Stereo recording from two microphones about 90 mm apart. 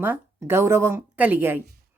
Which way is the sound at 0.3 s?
30° right (ahead or behind).